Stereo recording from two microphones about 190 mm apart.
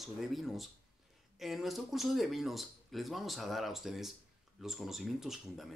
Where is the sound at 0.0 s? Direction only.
Centre (ahead or behind).